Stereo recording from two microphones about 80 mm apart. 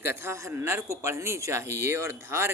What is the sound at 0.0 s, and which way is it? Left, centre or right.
Speech, right.